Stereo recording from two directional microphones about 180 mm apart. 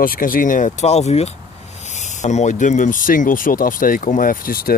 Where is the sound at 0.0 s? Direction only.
50° left (ahead or behind).